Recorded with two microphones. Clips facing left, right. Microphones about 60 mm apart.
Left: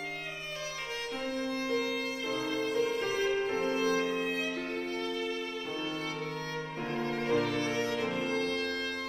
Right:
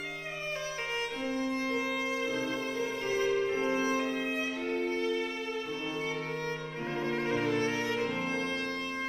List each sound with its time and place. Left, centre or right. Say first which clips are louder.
1.5 s music: even; right
2.7 s music: left 2 dB; left
3.5 s music: even; right
6.9 s music: even; right